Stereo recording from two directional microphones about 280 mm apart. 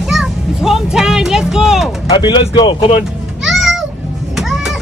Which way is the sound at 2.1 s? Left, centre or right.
Centre.